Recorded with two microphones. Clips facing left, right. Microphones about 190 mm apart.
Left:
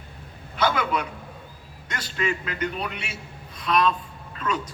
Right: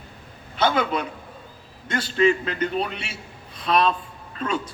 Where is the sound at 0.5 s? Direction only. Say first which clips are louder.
Right 2 dB; 30° right (ahead or behind).